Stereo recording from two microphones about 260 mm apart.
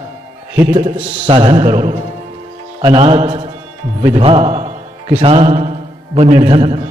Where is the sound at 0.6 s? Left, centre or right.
Centre.